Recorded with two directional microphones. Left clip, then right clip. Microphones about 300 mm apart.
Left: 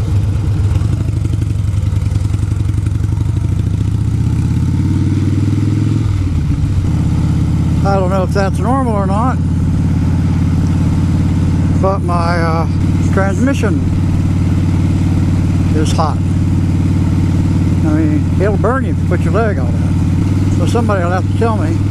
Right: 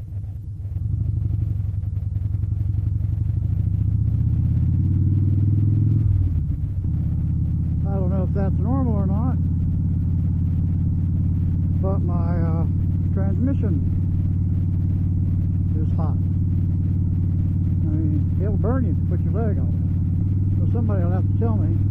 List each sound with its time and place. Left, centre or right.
7.8 s speech: centre
11.8 s speech: centre
15.8 s speech: centre
17.8 s speech: centre
20.7 s speech: centre